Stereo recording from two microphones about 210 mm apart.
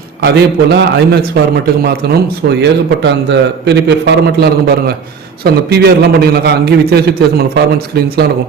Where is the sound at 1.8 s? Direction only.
50° right (ahead or behind).